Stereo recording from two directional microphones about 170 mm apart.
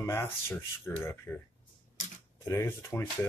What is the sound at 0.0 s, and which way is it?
Speech, 15° left (ahead or behind).